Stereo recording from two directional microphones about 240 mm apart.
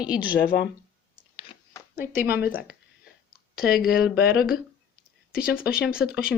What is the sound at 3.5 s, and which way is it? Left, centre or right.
Speech, left.